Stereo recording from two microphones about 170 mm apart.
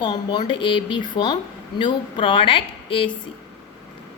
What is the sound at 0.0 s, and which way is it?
A woman's voice, 25° left (ahead or behind).